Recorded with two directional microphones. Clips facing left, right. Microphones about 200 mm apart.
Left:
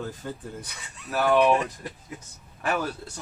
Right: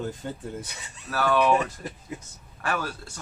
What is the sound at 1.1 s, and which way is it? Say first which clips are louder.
Speech: left 2 dB; 15° left (ahead or behind).